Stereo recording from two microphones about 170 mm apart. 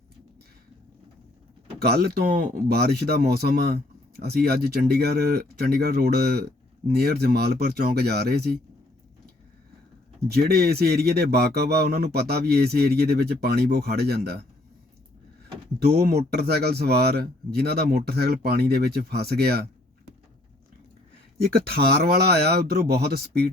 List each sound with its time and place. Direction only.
1.8 s a man's voice: 70° right (ahead or behind)
10.2 s a man's voice: 70° right (ahead or behind)
15.8 s a man's voice: 70° right (ahead or behind)
21.4 s a man's voice: 65° right (ahead or behind)